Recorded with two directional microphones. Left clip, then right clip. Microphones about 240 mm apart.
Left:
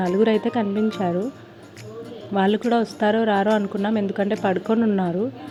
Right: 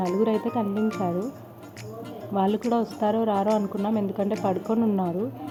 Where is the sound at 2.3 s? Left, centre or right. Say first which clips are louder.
Left 4 dB; centre.